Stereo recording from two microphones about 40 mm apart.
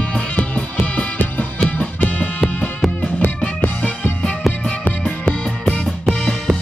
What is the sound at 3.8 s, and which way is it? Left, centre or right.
Music, left.